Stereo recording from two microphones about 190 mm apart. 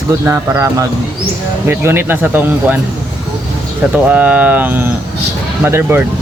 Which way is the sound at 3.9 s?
10° right (ahead or behind).